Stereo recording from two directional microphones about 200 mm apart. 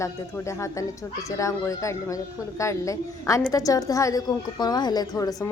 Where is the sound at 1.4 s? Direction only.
15° left (ahead or behind).